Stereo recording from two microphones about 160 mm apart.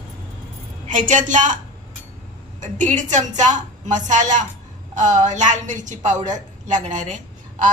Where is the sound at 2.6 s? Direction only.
50° right (ahead or behind).